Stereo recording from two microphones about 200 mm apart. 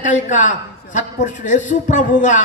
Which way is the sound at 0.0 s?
40° left (ahead or behind).